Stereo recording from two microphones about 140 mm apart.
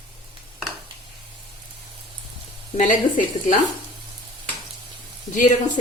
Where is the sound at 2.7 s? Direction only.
65° left (ahead or behind).